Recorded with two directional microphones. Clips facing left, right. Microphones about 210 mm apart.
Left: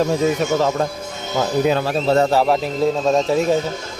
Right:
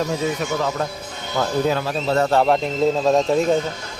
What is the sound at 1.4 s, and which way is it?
Speech, 20° left (ahead or behind).